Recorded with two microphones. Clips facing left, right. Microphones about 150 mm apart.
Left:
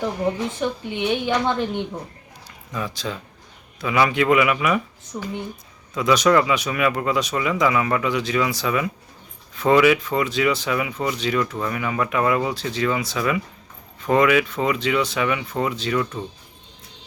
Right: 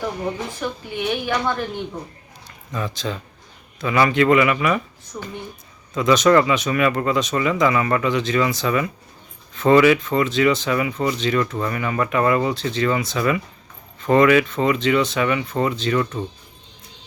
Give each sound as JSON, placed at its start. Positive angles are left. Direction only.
{"t": 0.6, "sound": "a woman's voice", "side_deg": 20}
{"t": 2.7, "sound": "speech", "side_deg": 10}
{"t": 5.1, "sound": "a woman's voice", "side_deg": 25}
{"t": 5.9, "sound": "speech", "side_deg": 10}